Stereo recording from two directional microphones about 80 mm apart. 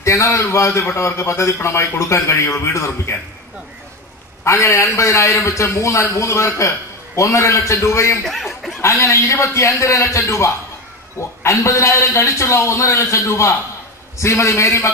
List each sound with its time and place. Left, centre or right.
0.0 s a man's voice: left
4.5 s a man's voice: left